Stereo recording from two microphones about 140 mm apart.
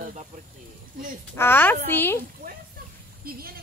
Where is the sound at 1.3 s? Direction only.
15° left (ahead or behind).